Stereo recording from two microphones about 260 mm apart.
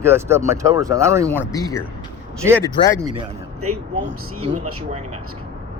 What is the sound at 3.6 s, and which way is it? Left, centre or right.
Speech, right.